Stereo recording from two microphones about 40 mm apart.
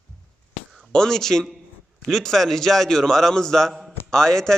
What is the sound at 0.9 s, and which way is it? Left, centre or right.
A man's voice, centre.